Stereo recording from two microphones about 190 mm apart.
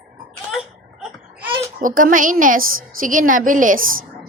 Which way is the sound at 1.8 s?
45° right (ahead or behind).